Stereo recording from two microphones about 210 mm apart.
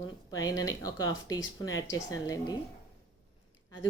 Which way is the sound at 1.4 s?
65° left (ahead or behind).